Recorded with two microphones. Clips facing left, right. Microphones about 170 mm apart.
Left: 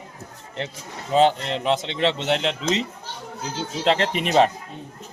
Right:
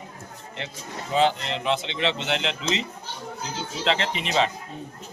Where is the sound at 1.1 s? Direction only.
35° left (ahead or behind).